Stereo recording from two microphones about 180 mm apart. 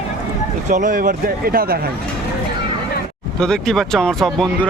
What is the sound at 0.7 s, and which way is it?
Speech, 45° right (ahead or behind).